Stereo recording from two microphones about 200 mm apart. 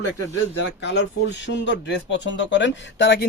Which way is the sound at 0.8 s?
60° left (ahead or behind).